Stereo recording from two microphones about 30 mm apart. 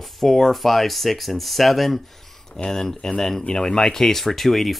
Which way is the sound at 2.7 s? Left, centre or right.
Centre.